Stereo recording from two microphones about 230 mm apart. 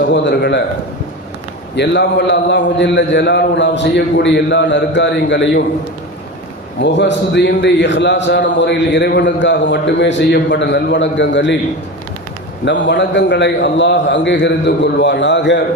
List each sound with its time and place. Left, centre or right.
0.1 s a man's voice: left
1.7 s a man's voice: left
6.8 s a man's voice: left
12.6 s a man's voice: left